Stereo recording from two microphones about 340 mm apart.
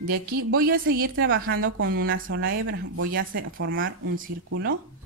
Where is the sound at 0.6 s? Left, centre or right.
Right.